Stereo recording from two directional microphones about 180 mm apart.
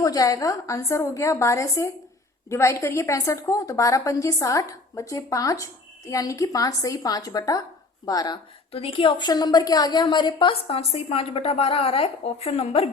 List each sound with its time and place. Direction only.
0.0 s a woman's voice: 20° left (ahead or behind)